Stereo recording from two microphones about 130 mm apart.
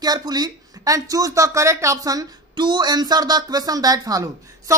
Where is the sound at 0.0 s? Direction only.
30° right (ahead or behind).